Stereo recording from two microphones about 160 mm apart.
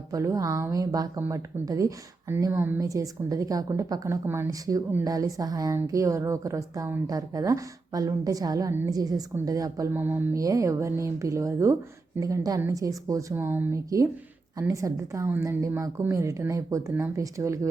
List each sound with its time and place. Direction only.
0.1 s a woman's voice: 20° right (ahead or behind)